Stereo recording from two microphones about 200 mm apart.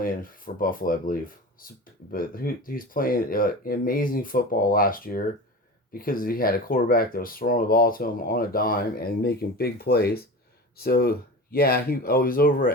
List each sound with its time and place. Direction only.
0.0 s speech: 45° left (ahead or behind)